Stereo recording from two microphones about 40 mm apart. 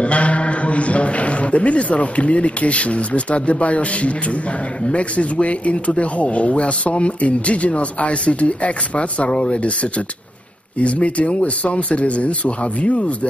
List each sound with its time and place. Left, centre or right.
0.0 s a man's voice: left